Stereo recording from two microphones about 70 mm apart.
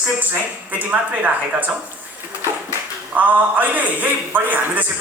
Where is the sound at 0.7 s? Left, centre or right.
Right.